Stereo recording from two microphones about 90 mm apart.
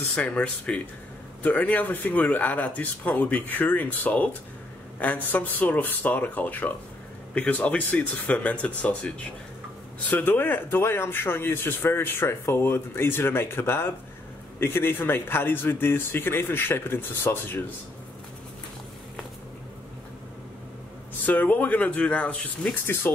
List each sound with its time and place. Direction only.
0.1 s speech: 15° left (ahead or behind)
21.3 s speech: 20° left (ahead or behind)